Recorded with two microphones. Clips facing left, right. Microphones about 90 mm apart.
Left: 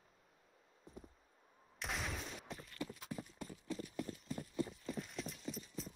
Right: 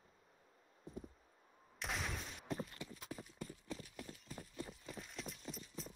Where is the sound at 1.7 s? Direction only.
Centre (ahead or behind).